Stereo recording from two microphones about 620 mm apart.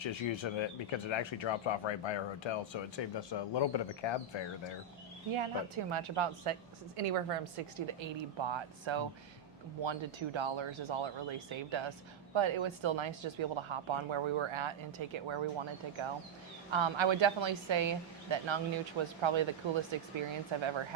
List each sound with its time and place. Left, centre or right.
0.0 s speech: left
5.3 s speech: right